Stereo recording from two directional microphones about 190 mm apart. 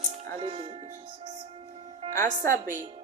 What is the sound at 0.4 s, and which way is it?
Speech, 30° right (ahead or behind).